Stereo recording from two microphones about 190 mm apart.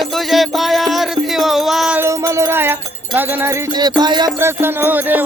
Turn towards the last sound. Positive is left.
turn(degrees=-10)  # may be behind; listen again after turning